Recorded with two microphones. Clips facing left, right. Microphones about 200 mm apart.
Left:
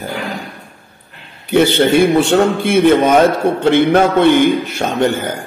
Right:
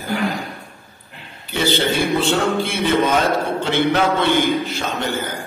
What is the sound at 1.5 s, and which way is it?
A man's voice, 55° left (ahead or behind).